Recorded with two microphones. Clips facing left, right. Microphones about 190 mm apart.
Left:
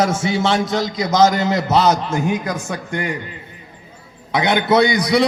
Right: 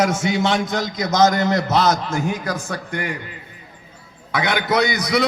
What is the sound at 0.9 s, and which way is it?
A man's voice, 10° left (ahead or behind).